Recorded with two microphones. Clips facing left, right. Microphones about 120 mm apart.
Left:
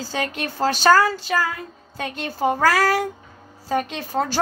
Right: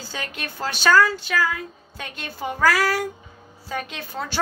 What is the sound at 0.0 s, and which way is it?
Female singing, 35° left (ahead or behind).